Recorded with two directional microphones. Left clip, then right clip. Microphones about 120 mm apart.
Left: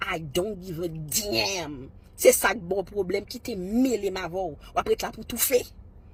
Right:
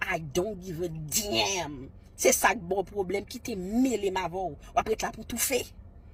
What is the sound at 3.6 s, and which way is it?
Speech, 40° left (ahead or behind).